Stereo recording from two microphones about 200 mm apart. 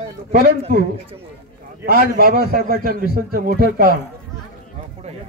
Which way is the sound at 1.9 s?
50° right (ahead or behind).